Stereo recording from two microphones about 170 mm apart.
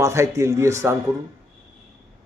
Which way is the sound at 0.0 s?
15° right (ahead or behind).